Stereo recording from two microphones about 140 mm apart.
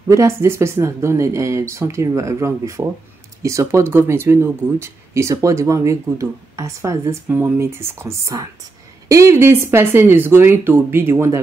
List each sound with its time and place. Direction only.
0.1 s speech: 20° right (ahead or behind)